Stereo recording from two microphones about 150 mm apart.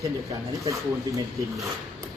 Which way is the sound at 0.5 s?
20° right (ahead or behind).